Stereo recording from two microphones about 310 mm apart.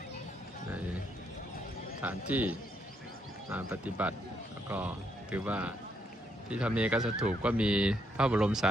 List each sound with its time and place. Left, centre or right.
2.0 s speech: centre
5.3 s speech: centre